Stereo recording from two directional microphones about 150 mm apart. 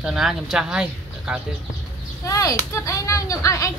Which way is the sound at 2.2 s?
20° left (ahead or behind).